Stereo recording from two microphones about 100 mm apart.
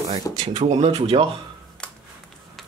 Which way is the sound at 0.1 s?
90° right.